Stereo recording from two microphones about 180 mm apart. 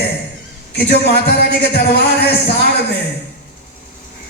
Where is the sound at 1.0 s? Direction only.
60° left (ahead or behind).